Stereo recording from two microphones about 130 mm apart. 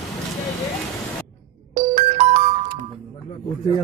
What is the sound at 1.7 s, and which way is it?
Music, 50° right (ahead or behind).